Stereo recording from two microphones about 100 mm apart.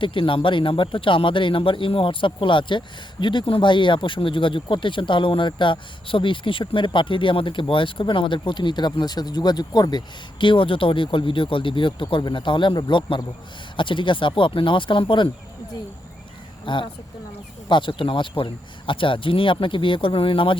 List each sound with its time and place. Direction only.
0.0 s speech: 60° left (ahead or behind)
16.6 s speech: 55° left (ahead or behind)